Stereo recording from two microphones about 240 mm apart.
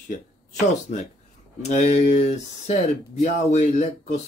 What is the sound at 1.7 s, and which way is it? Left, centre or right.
Speech, left.